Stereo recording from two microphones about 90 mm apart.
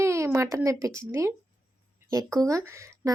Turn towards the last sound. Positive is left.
turn(degrees=-35)  # may be behind; listen again after turning